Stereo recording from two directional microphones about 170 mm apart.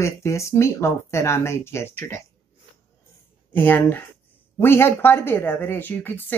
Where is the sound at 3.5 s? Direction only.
10° left (ahead or behind).